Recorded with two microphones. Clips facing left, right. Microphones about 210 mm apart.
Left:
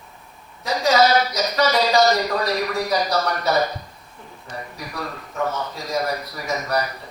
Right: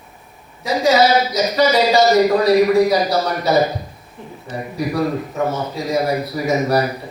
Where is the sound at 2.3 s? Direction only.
25° right (ahead or behind).